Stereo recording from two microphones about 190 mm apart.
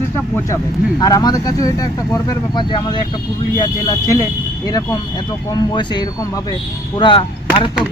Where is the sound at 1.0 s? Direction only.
20° left (ahead or behind).